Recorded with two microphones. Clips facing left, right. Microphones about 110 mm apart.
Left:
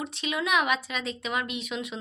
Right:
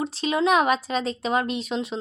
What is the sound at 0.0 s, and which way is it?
A woman's voice, 35° right (ahead or behind).